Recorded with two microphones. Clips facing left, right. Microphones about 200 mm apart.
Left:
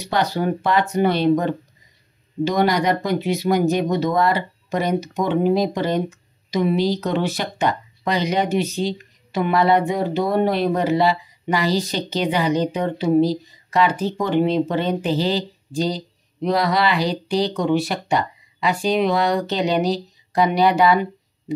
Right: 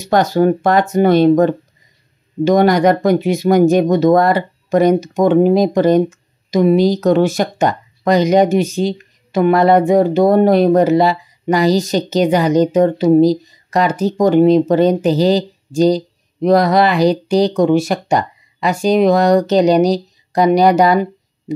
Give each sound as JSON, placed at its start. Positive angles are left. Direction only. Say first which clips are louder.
{"t": 0.0, "sound": "speech", "louder": "right 8 dB", "side_deg": -45}